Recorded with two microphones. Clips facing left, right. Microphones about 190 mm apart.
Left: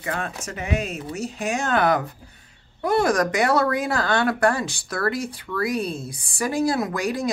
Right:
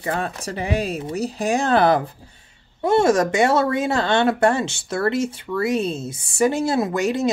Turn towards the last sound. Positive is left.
turn(degrees=-25)  # may be behind; listen again after turning